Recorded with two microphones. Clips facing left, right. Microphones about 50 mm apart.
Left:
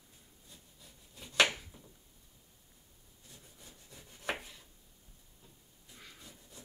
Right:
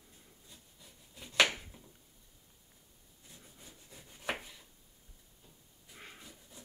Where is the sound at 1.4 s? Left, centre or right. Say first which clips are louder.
Even; right.